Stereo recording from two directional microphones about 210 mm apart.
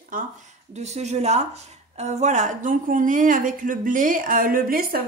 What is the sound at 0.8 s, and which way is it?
A woman's voice, 30° right (ahead or behind).